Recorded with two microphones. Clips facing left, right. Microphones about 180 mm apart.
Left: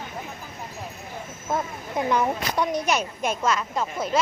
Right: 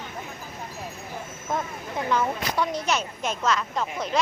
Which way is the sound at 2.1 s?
15° left (ahead or behind).